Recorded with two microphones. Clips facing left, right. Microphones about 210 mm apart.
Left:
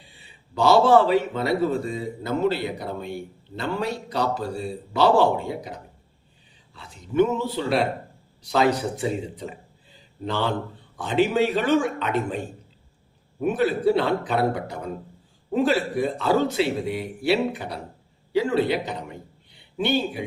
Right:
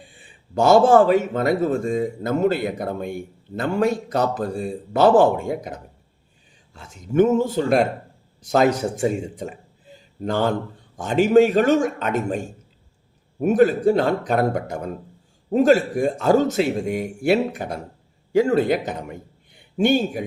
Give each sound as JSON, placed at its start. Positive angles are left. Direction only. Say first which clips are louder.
{"t": 0.0, "sound": "a man's voice", "louder": "right 5 dB", "side_deg": -50}